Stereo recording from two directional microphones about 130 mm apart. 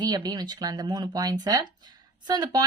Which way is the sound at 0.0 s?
30° right (ahead or behind).